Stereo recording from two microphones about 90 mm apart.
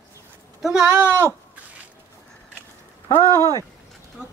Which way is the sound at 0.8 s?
25° right (ahead or behind).